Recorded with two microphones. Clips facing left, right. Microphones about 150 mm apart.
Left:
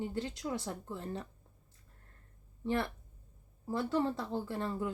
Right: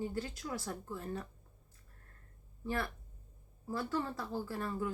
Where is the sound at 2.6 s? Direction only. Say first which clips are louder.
Left 4 dB; 25° left (ahead or behind).